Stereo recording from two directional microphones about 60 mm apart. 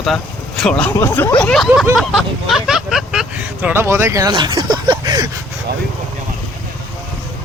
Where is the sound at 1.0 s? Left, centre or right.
Left.